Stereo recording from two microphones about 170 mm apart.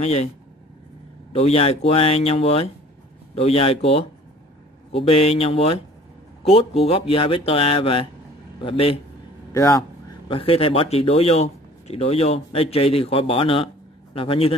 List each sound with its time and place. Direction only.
0.0 s speech: 40° left (ahead or behind)
1.3 s speech: 35° left (ahead or behind)
9.5 s speech: 20° left (ahead or behind)